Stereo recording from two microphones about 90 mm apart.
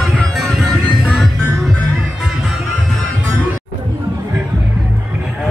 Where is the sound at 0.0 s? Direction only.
Centre (ahead or behind).